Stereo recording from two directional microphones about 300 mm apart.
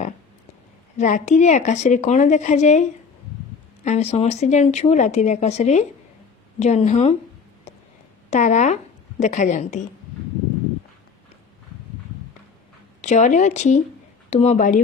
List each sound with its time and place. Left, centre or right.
0.9 s speech: left
8.3 s speech: left
13.0 s speech: left